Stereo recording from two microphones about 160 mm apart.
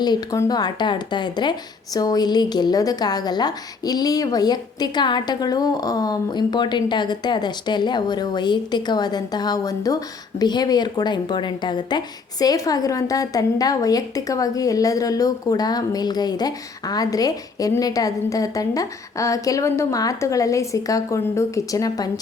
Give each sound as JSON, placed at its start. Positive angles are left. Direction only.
{"t": 0.0, "sound": "a woman's voice", "side_deg": 25}